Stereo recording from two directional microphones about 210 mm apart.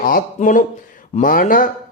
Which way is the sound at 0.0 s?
40° left (ahead or behind).